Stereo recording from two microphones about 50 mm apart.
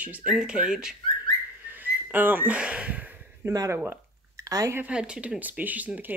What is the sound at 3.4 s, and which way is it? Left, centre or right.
Speech, right.